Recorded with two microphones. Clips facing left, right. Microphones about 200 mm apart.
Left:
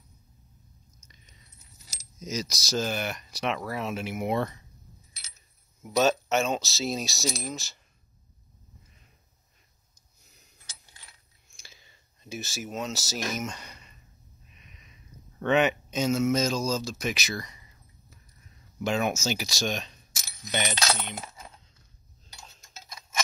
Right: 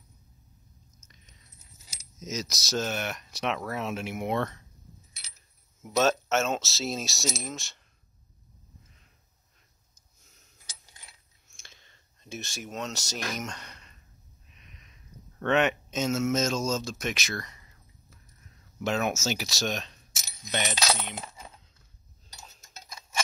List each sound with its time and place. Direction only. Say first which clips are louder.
2.1 s mechanisms: left 2 dB; centre (ahead or behind)
2.5 s speech: left 1 dB; centre (ahead or behind)
5.8 s speech: left 1 dB; centre (ahead or behind)
11.4 s a sound: left 1 dB; centre (ahead or behind)
13.3 s speech: left 2 dB; centre (ahead or behind)
18.8 s speech: left 1 dB; centre (ahead or behind)